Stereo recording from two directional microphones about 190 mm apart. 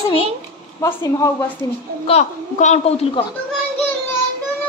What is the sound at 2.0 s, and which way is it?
A woman's voice, 35° left (ahead or behind).